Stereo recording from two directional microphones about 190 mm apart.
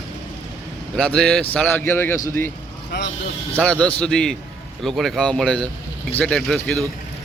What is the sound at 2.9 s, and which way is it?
Speech, 60° left (ahead or behind).